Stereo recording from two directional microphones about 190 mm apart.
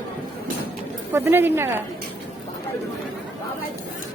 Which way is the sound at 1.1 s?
10° right (ahead or behind).